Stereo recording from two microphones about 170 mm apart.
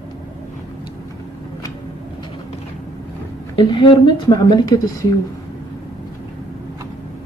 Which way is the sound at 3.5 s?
30° left (ahead or behind).